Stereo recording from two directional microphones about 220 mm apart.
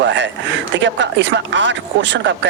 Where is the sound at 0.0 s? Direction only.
55° right (ahead or behind).